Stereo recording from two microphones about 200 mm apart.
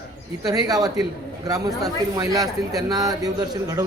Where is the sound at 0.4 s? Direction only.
20° right (ahead or behind).